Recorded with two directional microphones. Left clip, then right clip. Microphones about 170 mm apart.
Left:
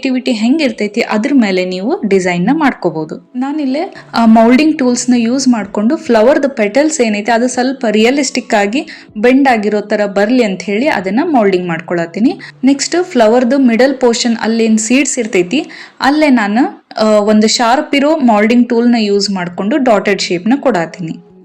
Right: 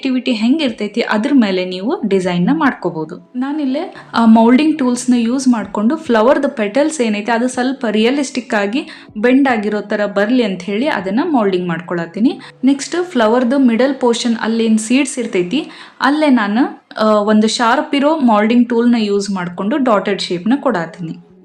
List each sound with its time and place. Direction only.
0.0 s speech: 15° left (ahead or behind)